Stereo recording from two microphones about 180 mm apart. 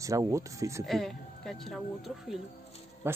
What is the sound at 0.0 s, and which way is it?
Speech, 20° right (ahead or behind).